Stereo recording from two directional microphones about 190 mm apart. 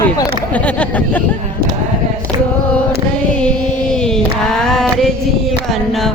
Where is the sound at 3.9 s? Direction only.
5° left (ahead or behind).